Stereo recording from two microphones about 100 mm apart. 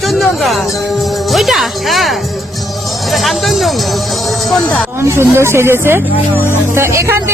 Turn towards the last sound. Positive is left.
turn(degrees=-30)  # may be behind; listen again after turning